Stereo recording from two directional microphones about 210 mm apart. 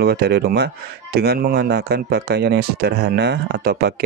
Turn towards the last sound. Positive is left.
turn(degrees=-50)  # may be behind; listen again after turning